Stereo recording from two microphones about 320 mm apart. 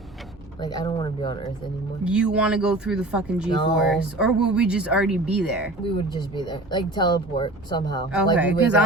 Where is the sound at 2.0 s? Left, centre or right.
Centre.